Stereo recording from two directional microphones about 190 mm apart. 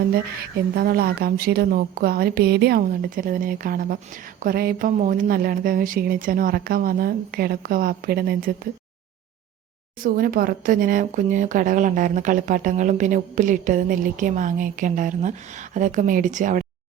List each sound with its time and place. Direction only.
0.1 s speech: 55° right (ahead or behind)
10.0 s speech: 50° right (ahead or behind)